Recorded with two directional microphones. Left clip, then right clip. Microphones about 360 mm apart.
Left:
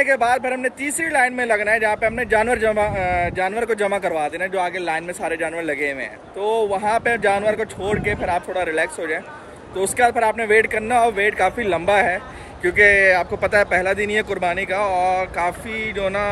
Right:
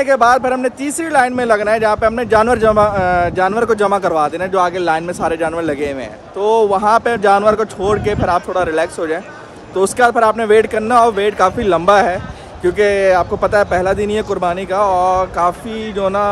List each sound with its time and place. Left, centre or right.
0.0 s speech: centre
14.9 s speech: right